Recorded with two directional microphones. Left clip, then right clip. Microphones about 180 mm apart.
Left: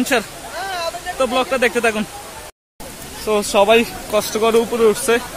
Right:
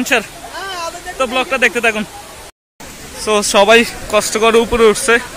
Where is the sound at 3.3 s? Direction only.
5° right (ahead or behind).